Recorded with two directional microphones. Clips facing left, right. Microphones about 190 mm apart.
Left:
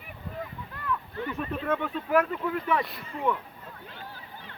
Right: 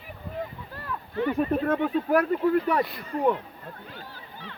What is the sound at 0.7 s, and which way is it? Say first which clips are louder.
Speech: left 2 dB; 35° right (ahead or behind).